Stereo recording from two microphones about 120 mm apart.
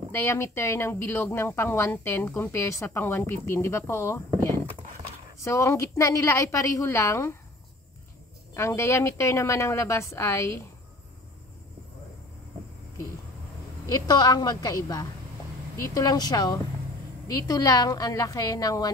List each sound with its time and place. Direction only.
0.1 s speech: 20° left (ahead or behind)
8.5 s speech: 25° left (ahead or behind)
13.8 s a woman's voice: 35° left (ahead or behind)